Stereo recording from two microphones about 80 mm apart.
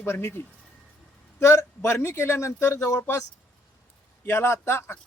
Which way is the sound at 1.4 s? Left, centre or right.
Left.